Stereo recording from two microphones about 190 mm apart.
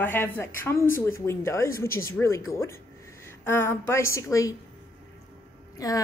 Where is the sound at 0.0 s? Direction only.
10° left (ahead or behind).